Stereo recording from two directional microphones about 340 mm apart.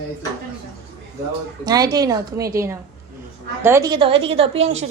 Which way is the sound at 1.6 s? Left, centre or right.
Centre.